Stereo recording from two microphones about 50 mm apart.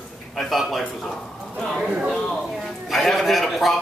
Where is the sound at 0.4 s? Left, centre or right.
Centre.